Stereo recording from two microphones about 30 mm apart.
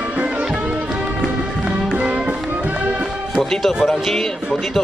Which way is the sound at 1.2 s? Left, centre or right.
Right.